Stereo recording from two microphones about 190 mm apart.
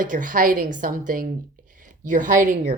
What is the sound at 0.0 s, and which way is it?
A woman's voice, 45° right (ahead or behind).